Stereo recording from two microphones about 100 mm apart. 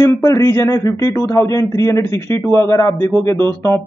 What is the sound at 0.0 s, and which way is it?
Speech, 30° left (ahead or behind).